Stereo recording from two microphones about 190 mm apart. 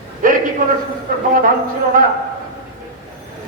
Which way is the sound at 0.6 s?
45° right (ahead or behind).